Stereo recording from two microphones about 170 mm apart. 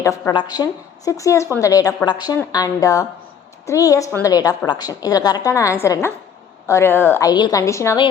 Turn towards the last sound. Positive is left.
turn(degrees=15)  # may be behind; listen again after turning